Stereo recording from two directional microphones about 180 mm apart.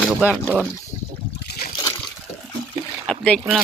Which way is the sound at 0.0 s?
5° right (ahead or behind).